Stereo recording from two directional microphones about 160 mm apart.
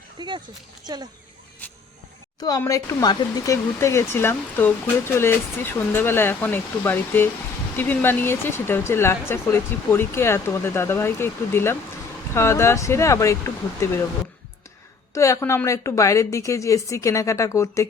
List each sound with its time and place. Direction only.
0.2 s speech: 30° right (ahead or behind)
2.4 s speech: 20° left (ahead or behind)
15.1 s a woman's voice: 20° left (ahead or behind)